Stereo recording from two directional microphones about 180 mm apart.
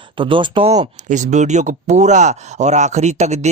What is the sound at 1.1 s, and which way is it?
Speech, 40° right (ahead or behind).